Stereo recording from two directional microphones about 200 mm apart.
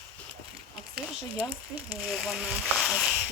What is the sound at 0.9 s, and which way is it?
Speech, 10° right (ahead or behind).